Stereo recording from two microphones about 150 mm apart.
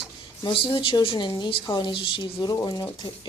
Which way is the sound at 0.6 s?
35° left (ahead or behind).